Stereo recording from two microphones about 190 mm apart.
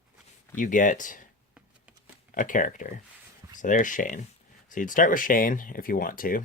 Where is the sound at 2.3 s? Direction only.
45° left (ahead or behind).